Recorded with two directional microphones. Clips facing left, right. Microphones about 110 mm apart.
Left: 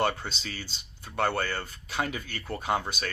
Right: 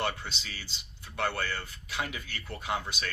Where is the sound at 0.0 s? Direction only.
40° left (ahead or behind).